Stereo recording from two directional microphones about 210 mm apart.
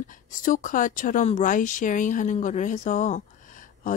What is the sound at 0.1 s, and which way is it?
Speech, 40° left (ahead or behind).